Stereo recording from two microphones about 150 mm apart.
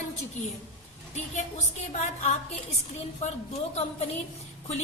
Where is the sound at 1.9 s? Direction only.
50° left (ahead or behind).